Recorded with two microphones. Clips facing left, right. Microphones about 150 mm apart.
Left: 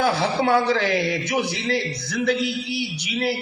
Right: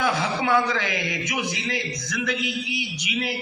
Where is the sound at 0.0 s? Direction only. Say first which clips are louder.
Left 4 dB; 30° left (ahead or behind).